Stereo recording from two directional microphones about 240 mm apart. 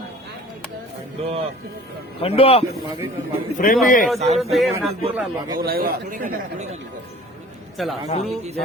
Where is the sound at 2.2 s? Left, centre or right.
Left.